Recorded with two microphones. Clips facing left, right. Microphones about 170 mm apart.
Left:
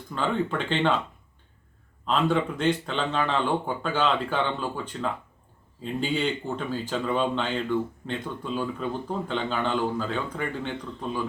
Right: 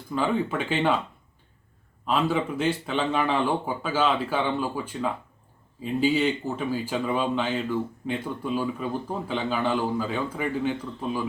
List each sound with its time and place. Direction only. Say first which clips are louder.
0.1 s speech: right 2 dB; 10° right (ahead or behind)
2.0 s speech: even; 5° right (ahead or behind)